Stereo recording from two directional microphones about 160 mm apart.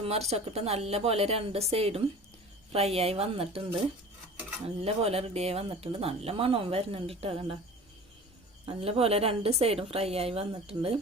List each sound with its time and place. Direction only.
0.3 s speech: 40° right (ahead or behind)
4.8 s speech: 40° right (ahead or behind)
8.6 s speech: 35° right (ahead or behind)